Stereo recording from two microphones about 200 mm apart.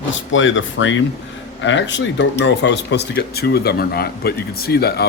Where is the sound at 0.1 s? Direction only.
70° left (ahead or behind).